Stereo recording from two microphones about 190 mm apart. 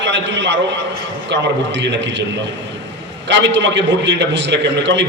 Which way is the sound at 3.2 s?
70° right (ahead or behind).